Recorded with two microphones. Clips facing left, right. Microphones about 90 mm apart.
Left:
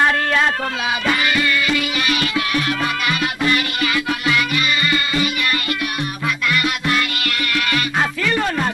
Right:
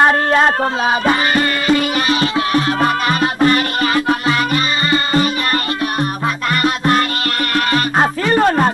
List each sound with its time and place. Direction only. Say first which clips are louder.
0.0 s music: right 5 dB; 40° right (ahead or behind)
6.5 s music: right 6 dB; 40° right (ahead or behind)